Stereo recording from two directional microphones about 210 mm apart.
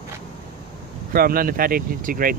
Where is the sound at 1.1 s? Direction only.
45° right (ahead or behind).